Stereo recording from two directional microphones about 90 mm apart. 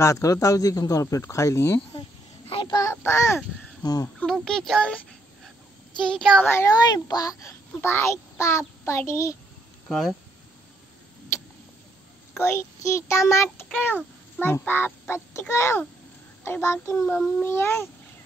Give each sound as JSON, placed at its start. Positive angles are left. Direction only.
{"t": 0.0, "sound": "child singing", "side_deg": 35}
{"t": 2.0, "sound": "a sound", "side_deg": 90}
{"t": 2.7, "sound": "child singing", "side_deg": 35}
{"t": 3.0, "sound": "speech", "side_deg": 30}
{"t": 4.3, "sound": "speech", "side_deg": 5}
{"t": 6.4, "sound": "quack", "side_deg": 25}
{"t": 6.7, "sound": "a child's voice", "side_deg": 50}
{"t": 7.8, "sound": "child singing", "side_deg": 30}
{"t": 9.8, "sound": "speech", "side_deg": 0}
{"t": 12.4, "sound": "child singing", "side_deg": 30}
{"t": 14.4, "sound": "speech", "side_deg": 20}
{"t": 14.7, "sound": "quack", "side_deg": 25}